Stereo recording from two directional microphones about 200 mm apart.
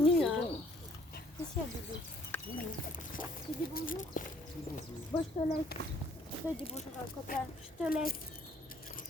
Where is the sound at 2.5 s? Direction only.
45° left (ahead or behind).